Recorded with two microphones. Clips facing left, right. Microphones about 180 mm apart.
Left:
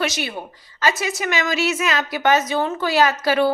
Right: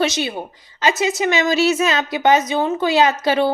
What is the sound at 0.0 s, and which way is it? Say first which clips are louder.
A woman's voice: right 4 dB; 20° right (ahead or behind).